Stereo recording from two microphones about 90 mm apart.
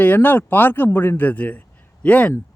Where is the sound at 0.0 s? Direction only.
20° left (ahead or behind).